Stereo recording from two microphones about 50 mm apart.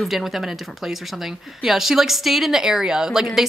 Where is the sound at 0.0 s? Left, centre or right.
Centre.